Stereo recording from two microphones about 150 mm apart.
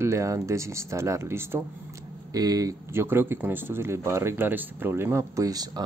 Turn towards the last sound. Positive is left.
turn(degrees=-25)  # may be behind; listen again after turning